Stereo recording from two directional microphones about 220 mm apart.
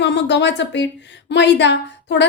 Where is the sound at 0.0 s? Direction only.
50° left (ahead or behind).